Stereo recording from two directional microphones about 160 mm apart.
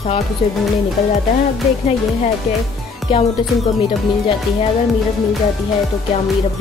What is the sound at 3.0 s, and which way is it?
Music, 40° left (ahead or behind).